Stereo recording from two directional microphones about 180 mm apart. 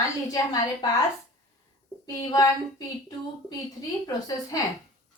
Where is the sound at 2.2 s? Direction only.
20° left (ahead or behind).